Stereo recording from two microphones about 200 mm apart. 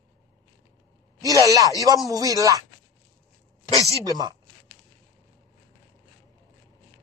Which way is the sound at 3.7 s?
15° left (ahead or behind).